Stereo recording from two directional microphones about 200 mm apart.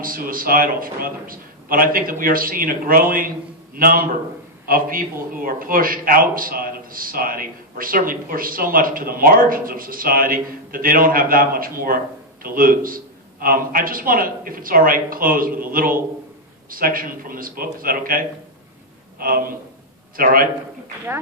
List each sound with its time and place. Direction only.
0.0 s a man's voice: 45° right (ahead or behind)